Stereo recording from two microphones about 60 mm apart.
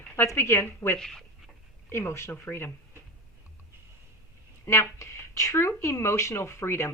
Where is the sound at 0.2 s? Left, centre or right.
Left.